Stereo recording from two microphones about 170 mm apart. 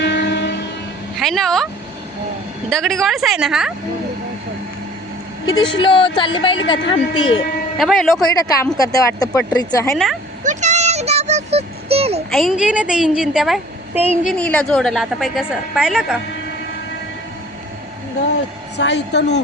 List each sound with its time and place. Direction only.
0.0 s train: 90° left
1.2 s a woman's voice: centre (ahead or behind)
2.6 s a woman's voice: centre (ahead or behind)
5.5 s speech: 25° left (ahead or behind)
7.8 s a woman's voice: centre (ahead or behind)
8.8 s speech: 20° left (ahead or behind)
9.9 s a woman's voice: centre (ahead or behind)
10.4 s a sound: 45° right (ahead or behind)
12.3 s a woman's voice: centre (ahead or behind)
14.3 s a woman's voice: 5° left (ahead or behind)
18.8 s a woman's voice: 90° left